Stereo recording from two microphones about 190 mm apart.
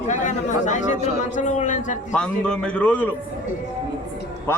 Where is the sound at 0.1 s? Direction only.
40° left (ahead or behind).